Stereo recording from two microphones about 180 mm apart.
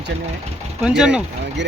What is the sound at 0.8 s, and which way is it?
Speech, 5° right (ahead or behind).